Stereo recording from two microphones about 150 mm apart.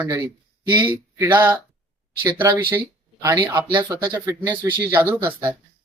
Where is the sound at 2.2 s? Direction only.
30° right (ahead or behind).